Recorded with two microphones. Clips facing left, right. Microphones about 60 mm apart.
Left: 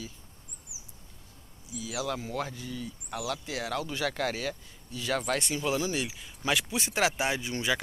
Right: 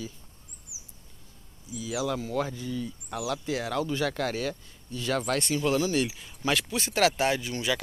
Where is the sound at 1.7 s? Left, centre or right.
Centre.